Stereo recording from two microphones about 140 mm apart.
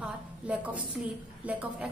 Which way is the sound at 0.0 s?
10° right (ahead or behind).